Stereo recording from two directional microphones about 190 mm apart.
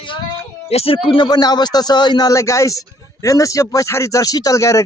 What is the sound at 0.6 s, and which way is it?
Speech, 30° left (ahead or behind).